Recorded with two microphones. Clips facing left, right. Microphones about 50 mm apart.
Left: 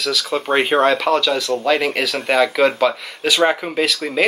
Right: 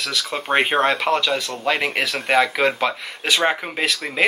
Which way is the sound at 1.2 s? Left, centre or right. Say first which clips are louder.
Left 3 dB; right.